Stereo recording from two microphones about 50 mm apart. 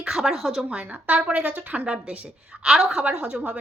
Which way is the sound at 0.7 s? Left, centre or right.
Right.